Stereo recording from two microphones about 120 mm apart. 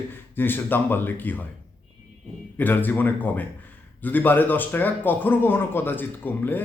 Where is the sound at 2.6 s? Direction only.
15° left (ahead or behind).